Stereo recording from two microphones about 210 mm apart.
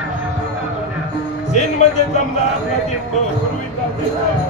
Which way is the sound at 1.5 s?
35° left (ahead or behind).